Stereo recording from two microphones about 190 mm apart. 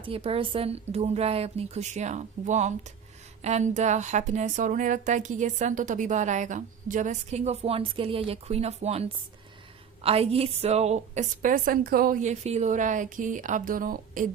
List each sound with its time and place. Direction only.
0.0 s a woman's voice: 30° right (ahead or behind); by 14.3 s 45° right (ahead or behind)